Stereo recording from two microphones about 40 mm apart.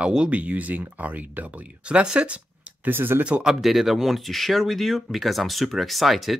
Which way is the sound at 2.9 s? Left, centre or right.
Right.